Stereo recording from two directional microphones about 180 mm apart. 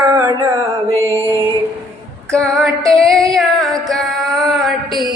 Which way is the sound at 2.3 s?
5° left (ahead or behind).